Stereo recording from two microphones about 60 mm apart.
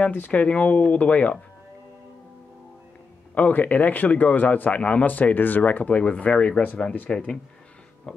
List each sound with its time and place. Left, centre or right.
0.1 s a man's voice: left
3.3 s a man's voice: left
7.1 s speech: centre